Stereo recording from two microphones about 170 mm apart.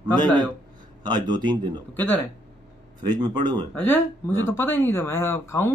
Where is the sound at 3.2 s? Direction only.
25° right (ahead or behind).